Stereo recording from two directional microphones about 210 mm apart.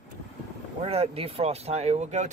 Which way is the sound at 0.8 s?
30° right (ahead or behind).